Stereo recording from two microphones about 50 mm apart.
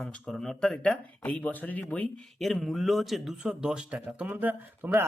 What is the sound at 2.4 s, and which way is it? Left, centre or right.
Speech, centre.